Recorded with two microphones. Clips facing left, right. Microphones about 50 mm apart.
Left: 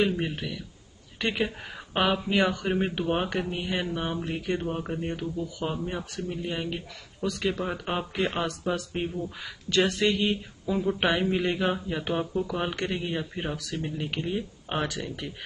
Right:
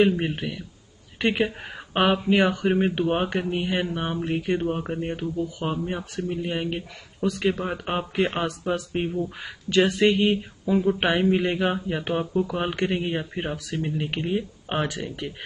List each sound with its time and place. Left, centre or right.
0.2 s speech: centre